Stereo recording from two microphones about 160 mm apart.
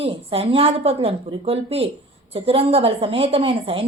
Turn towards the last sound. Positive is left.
turn(degrees=-35)  # may be behind; listen again after turning